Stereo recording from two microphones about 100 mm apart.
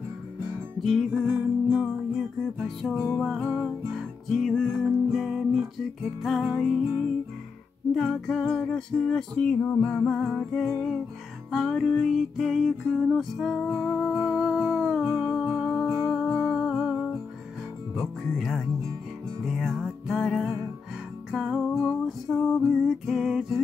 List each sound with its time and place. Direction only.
0.7 s music: 5° left (ahead or behind)
1.1 s music: 20° right (ahead or behind)
2.1 s music: centre (ahead or behind)
7.9 s music: 5° left (ahead or behind)
17.9 s speech: centre (ahead or behind)
19.4 s music: 5° right (ahead or behind)